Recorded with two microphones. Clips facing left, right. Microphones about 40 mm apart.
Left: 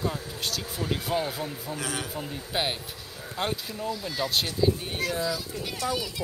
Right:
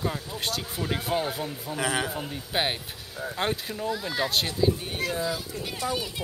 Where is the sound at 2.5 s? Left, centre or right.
Centre.